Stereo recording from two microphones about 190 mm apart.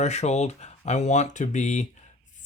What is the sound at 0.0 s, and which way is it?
Speech, 35° left (ahead or behind).